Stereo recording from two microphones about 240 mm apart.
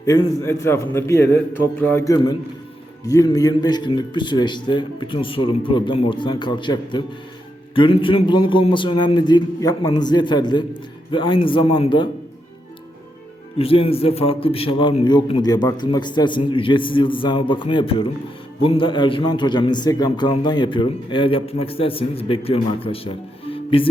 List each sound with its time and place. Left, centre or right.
0.0 s a man's voice: centre
13.6 s a man's voice: left
23.5 s music: left